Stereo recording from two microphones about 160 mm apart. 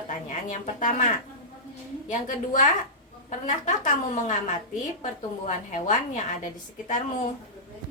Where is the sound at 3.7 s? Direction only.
50° left (ahead or behind).